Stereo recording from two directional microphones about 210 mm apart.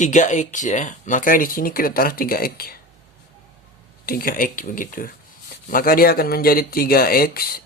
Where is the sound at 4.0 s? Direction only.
45° left (ahead or behind).